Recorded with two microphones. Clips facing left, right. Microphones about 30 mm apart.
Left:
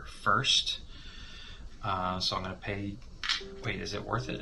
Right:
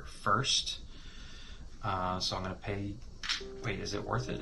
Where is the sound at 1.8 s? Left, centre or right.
Left.